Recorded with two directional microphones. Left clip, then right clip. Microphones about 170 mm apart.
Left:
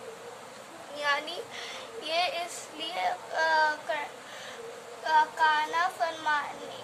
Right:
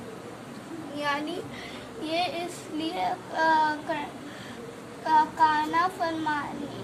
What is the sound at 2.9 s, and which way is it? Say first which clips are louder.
A woman's voice: even; centre (ahead or behind).